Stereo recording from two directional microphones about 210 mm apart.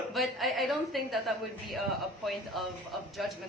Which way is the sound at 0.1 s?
Centre (ahead or behind).